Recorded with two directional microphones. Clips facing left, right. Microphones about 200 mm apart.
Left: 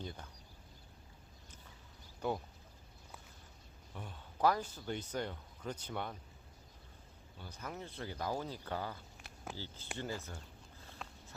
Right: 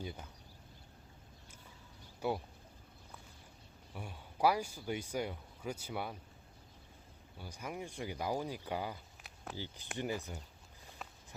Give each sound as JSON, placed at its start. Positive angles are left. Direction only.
{"t": 0.0, "sound": "speech", "side_deg": -10}
{"t": 2.2, "sound": "speech", "side_deg": -10}
{"t": 3.9, "sound": "speech", "side_deg": -10}
{"t": 7.3, "sound": "speech", "side_deg": -10}
{"t": 9.2, "sound": "a sound", "side_deg": 0}
{"t": 9.6, "sound": "speech", "side_deg": -15}
{"t": 11.0, "sound": "a sound", "side_deg": -5}